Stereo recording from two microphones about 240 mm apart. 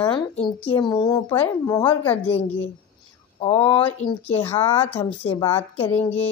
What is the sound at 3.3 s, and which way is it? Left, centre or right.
Speech, left.